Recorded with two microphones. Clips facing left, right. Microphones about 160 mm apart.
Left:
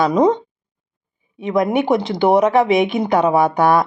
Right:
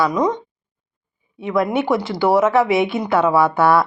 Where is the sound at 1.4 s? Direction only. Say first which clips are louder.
Left 2 dB; 20° left (ahead or behind).